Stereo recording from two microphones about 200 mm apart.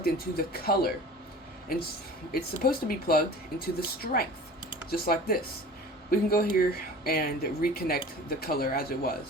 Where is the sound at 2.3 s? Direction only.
50° left (ahead or behind).